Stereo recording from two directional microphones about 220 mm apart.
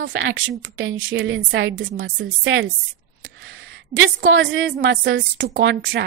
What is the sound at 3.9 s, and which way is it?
A woman's voice, 60° right (ahead or behind).